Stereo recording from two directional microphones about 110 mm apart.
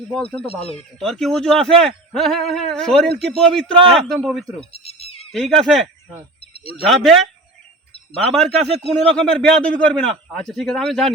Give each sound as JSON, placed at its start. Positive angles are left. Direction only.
{"t": 0.1, "sound": "a man's voice", "side_deg": 10}
{"t": 4.7, "sound": "a sound", "side_deg": 65}
{"t": 5.3, "sound": "a man's voice", "side_deg": 5}
{"t": 6.4, "sound": "a sound", "side_deg": 60}
{"t": 6.8, "sound": "a man's voice", "side_deg": 0}
{"t": 8.3, "sound": "a man's voice", "side_deg": 0}